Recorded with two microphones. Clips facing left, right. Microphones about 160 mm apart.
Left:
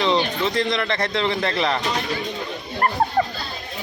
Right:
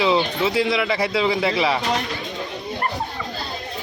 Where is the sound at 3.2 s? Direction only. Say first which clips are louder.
Left 11 dB; 55° left (ahead or behind).